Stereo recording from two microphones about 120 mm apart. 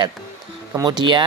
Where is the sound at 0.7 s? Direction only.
35° right (ahead or behind).